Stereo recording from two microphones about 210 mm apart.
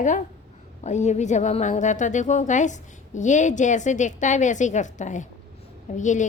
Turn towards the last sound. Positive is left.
turn(degrees=35)  # may be behind; listen again after turning